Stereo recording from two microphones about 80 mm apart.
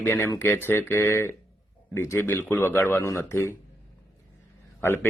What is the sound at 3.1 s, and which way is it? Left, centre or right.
Speech, left.